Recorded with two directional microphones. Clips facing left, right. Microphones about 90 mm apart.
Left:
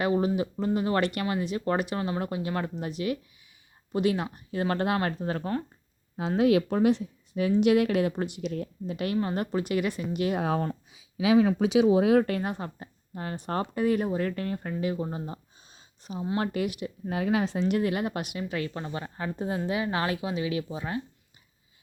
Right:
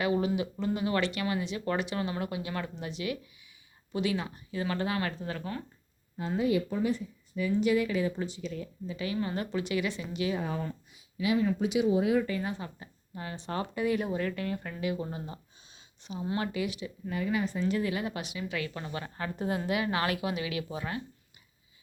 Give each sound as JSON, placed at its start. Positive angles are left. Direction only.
{"t": 0.0, "sound": "speech", "side_deg": 40}
{"t": 2.0, "sound": "speech", "side_deg": 30}
{"t": 2.2, "sound": "speech", "side_deg": 40}
{"t": 4.9, "sound": "speech", "side_deg": 35}
{"t": 6.1, "sound": "speech", "side_deg": 90}
{"t": 9.2, "sound": "speech", "side_deg": 45}
{"t": 10.4, "sound": "speech", "side_deg": 75}
{"t": 11.2, "sound": "speech", "side_deg": 90}
{"t": 14.9, "sound": "a sound", "side_deg": 30}
{"t": 16.4, "sound": "speech", "side_deg": 50}
{"t": 17.1, "sound": "a woman's voice", "side_deg": 90}
{"t": 17.7, "sound": "speech", "side_deg": 50}